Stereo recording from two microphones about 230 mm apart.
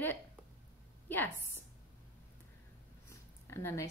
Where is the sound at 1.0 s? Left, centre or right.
Centre.